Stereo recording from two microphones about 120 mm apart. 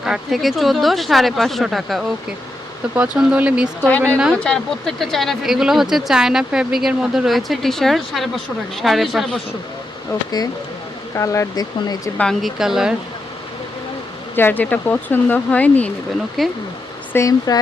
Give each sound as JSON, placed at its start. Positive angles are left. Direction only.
{"t": 0.0, "sound": "speech", "side_deg": -5}
{"t": 2.9, "sound": "speech", "side_deg": -10}
{"t": 3.8, "sound": "speech", "side_deg": 10}
{"t": 11.2, "sound": "speech", "side_deg": 25}
{"t": 12.1, "sound": "speech", "side_deg": 5}
{"t": 14.3, "sound": "speech", "side_deg": 15}
{"t": 16.4, "sound": "speech", "side_deg": 0}
{"t": 17.1, "sound": "speech", "side_deg": 25}